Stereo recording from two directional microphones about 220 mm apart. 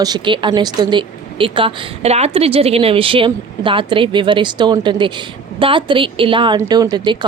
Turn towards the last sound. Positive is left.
turn(degrees=-20)  # may be behind; listen again after turning